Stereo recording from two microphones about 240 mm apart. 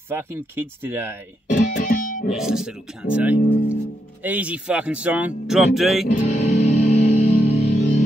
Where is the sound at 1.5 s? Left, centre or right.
Left.